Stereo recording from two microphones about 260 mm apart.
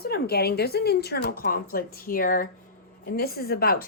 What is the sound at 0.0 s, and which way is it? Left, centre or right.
Speech, left.